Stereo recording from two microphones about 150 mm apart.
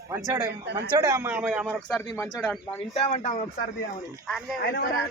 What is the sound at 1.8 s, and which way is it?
Speech, 5° left (ahead or behind).